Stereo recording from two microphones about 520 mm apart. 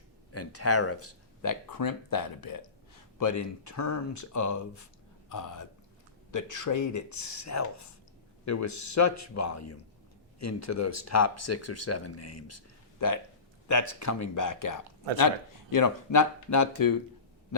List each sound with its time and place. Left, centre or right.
0.3 s speech: left